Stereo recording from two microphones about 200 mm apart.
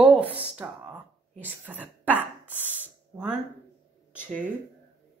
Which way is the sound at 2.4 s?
10° left (ahead or behind).